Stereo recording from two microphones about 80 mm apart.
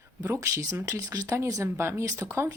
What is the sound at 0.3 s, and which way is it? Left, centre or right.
Speech, right.